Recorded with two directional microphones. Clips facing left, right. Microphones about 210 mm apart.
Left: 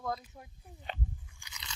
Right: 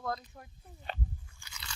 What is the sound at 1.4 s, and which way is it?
Scrape, 20° left (ahead or behind).